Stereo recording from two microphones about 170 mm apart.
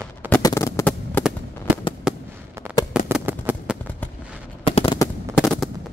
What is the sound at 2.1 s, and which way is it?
Fireworks, 5° right (ahead or behind).